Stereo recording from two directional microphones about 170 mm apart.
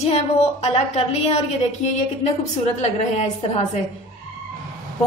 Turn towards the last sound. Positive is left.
turn(degrees=40)  # may be behind; listen again after turning